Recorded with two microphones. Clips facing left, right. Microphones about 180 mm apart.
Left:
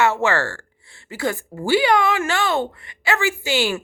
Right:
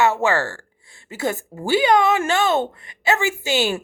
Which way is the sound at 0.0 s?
15° right (ahead or behind).